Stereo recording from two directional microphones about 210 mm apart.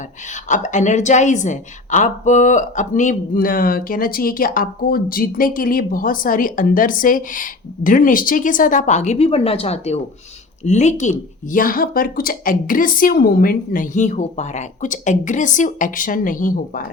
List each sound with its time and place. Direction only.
0.4 s a woman's voice: 35° left (ahead or behind)